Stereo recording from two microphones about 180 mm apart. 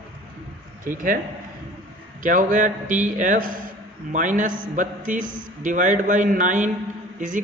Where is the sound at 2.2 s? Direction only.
45° right (ahead or behind).